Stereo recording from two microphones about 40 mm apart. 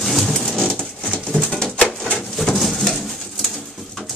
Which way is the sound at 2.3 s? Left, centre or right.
Centre.